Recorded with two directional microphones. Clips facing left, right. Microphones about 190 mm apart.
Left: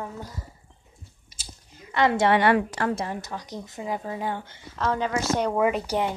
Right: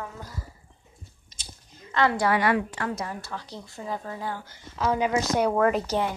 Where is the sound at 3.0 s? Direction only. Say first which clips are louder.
Left 3 dB; 25° left (ahead or behind).